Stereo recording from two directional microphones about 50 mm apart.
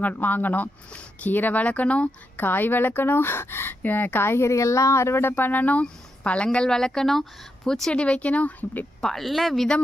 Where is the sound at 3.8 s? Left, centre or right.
Left.